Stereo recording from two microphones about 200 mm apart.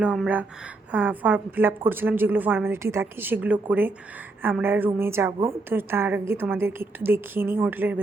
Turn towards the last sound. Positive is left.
turn(degrees=-10)  # may be behind; listen again after turning